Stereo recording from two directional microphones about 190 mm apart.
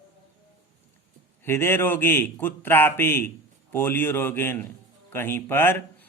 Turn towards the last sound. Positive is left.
turn(degrees=10)  # may be behind; listen again after turning